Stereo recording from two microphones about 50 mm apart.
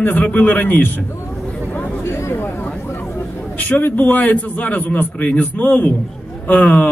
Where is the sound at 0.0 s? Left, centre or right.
Left.